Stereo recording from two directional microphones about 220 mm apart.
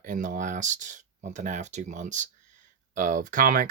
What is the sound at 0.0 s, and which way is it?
Speech, 40° right (ahead or behind).